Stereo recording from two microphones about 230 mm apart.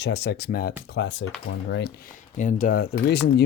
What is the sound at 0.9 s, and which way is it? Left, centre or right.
Speech, left.